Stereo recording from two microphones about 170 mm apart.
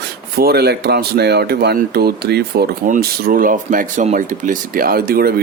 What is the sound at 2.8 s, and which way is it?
Speech, 55° right (ahead or behind).